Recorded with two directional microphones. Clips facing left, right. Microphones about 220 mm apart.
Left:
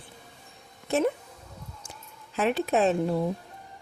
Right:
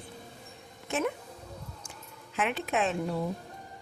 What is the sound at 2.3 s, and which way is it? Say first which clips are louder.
Speech: left 6 dB; 35° left (ahead or behind).